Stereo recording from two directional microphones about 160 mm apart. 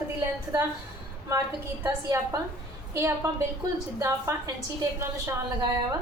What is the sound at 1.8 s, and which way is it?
A woman's voice, 20° right (ahead or behind).